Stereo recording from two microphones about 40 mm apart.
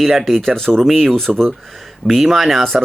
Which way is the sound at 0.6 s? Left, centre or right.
Centre.